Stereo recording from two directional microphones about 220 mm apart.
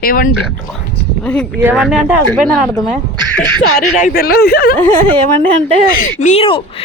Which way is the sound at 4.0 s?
40° left (ahead or behind).